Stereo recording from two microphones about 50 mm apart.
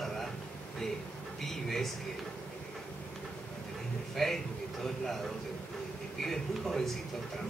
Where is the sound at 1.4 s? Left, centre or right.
Centre.